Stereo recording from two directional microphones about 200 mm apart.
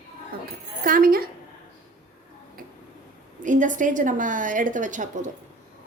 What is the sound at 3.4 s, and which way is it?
A woman's voice, 40° right (ahead or behind).